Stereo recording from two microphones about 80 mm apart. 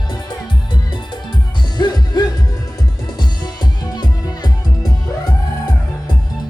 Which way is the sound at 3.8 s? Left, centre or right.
Left.